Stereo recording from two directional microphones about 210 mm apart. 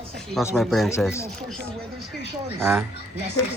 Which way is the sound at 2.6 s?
10° right (ahead or behind).